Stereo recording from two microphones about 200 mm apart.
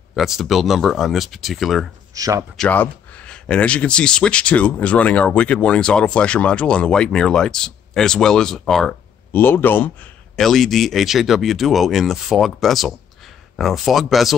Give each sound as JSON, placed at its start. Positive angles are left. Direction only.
{"t": 0.1, "sound": "speech", "side_deg": 0}
{"t": 2.1, "sound": "speech", "side_deg": -20}
{"t": 2.5, "sound": "speech", "side_deg": 5}